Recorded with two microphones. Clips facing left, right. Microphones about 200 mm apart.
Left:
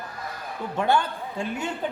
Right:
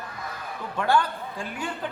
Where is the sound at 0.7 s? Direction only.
25° left (ahead or behind).